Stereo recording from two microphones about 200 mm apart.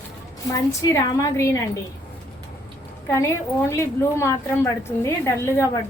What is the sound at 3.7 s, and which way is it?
A woman's voice, 15° left (ahead or behind).